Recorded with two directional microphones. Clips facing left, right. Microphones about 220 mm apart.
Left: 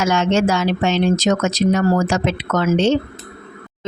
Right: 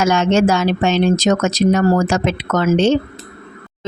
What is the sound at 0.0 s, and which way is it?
Speech, 45° right (ahead or behind).